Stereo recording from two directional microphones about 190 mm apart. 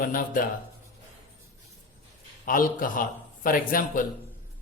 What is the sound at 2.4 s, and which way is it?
Speech, 45° left (ahead or behind).